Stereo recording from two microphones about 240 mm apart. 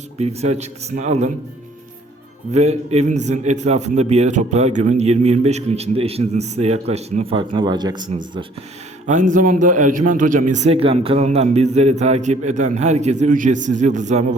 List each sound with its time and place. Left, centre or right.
0.2 s a man's voice: right
2.5 s a man's voice: right
9.0 s a man's voice: right